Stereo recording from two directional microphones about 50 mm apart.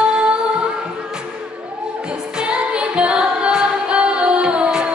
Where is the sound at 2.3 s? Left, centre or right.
Centre.